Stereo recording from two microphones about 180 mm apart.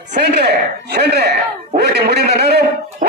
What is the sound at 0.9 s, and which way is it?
A man's voice, 65° right (ahead or behind).